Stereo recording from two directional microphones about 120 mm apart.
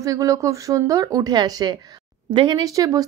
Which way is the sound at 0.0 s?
25° right (ahead or behind).